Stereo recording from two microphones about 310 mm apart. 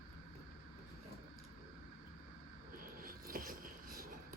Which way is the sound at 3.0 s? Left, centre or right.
Right.